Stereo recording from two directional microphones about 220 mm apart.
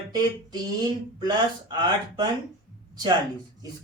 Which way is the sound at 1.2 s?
20° right (ahead or behind).